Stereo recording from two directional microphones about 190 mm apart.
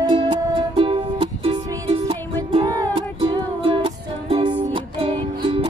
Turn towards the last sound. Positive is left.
turn(degrees=-25)  # may be behind; listen again after turning